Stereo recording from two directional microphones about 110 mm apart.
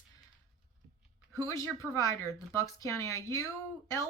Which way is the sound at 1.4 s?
25° left (ahead or behind).